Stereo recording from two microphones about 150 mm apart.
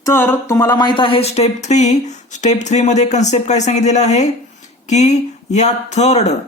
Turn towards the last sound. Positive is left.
turn(degrees=45)  # may be behind; listen again after turning